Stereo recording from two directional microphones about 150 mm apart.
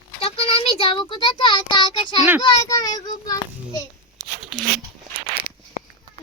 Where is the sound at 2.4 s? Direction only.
25° left (ahead or behind).